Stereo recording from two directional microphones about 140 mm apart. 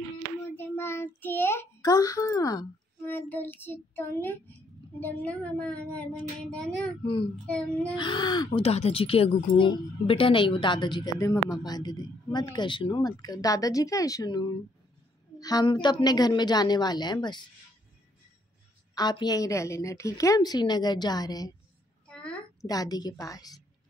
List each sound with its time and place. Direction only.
0.6 s child singing: 15° left (ahead or behind)
3.0 s child singing: 15° left (ahead or behind)
5.0 s a woman's voice: 10° left (ahead or behind)
7.9 s speech: 35° left (ahead or behind)
8.6 s a woman's voice: 45° left (ahead or behind); by 14.5 s 30° left (ahead or behind)
15.3 s a sound: 25° left (ahead or behind)
15.6 s speech: 35° left (ahead or behind)
18.9 s a woman's voice: 30° left (ahead or behind)
22.0 s a sound: 10° left (ahead or behind)
22.6 s a woman's voice: 25° left (ahead or behind)